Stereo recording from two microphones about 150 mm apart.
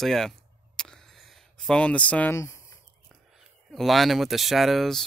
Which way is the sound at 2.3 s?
20° left (ahead or behind).